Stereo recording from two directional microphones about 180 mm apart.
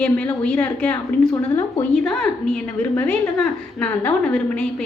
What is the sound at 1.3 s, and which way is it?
Speech, 20° left (ahead or behind).